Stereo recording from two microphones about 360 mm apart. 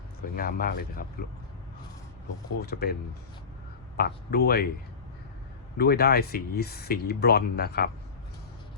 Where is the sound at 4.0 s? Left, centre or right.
Left.